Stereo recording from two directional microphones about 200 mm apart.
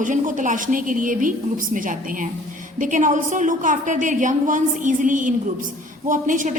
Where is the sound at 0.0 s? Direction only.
40° right (ahead or behind).